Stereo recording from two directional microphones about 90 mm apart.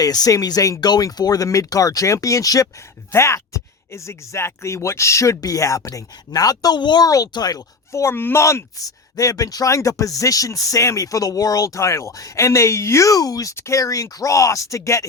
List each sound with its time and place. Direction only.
0.0 s speech: 45° left (ahead or behind)
6.7 s speech: 55° left (ahead or behind)
7.1 s speech: 45° left (ahead or behind)
8.0 s speech: 25° left (ahead or behind)